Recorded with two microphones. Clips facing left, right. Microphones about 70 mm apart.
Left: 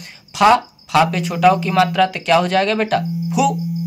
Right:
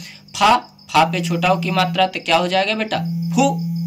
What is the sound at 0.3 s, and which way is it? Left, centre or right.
Speech, left.